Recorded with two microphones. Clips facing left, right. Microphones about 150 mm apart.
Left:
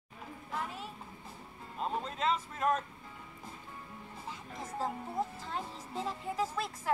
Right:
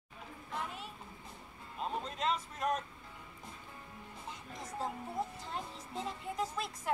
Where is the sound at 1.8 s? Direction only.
40° left (ahead or behind).